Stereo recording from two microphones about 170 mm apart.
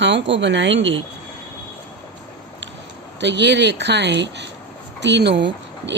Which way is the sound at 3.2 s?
90° right.